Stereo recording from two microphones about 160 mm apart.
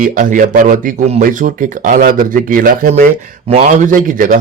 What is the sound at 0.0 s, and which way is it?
A man's voice, 55° right (ahead or behind).